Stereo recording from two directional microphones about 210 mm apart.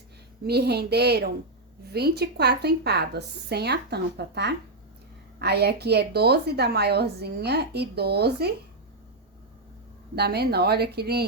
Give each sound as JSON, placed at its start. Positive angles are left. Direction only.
{"t": 0.4, "sound": "a woman's voice", "side_deg": -50}
{"t": 10.2, "sound": "a woman's voice", "side_deg": -50}